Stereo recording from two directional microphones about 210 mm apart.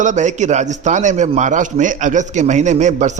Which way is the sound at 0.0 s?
35° right (ahead or behind).